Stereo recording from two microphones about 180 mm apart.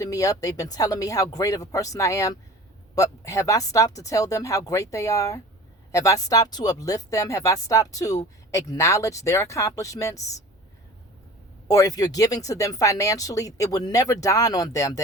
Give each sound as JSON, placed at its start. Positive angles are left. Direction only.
{"t": 0.0, "sound": "speech", "side_deg": 20}
{"t": 11.7, "sound": "speech", "side_deg": 20}